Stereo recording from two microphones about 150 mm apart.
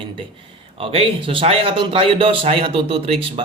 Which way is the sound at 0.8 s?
40° right (ahead or behind).